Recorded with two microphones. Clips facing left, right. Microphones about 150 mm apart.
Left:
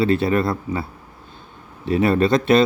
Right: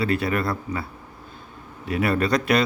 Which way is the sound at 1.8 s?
25° left (ahead or behind).